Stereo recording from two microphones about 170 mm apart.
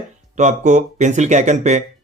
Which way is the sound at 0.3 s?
45° right (ahead or behind).